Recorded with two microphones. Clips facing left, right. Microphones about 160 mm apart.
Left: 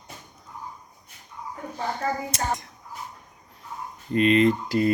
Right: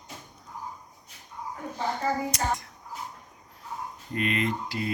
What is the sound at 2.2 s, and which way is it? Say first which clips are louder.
Speech: left 1 dB; 25° left (ahead or behind).